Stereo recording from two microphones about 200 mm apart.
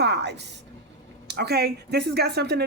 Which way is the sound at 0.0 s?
55° right (ahead or behind).